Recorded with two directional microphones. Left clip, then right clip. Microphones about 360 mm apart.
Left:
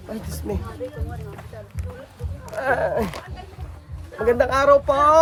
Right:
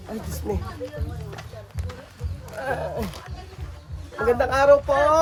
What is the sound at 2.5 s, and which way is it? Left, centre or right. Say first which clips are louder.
Speech: left 7 dB; centre.